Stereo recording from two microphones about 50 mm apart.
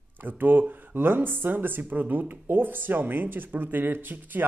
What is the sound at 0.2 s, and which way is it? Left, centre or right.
Speech, right.